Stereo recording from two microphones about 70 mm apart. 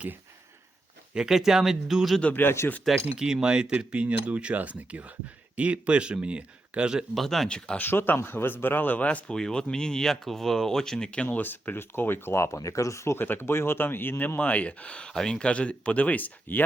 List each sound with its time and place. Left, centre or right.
1.1 s speech: centre
2.2 s speech: left
3.2 s speech: centre
7.1 s speech: centre
7.8 s speech: left